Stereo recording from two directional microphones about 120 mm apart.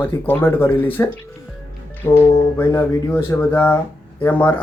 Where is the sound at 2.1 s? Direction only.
20° left (ahead or behind).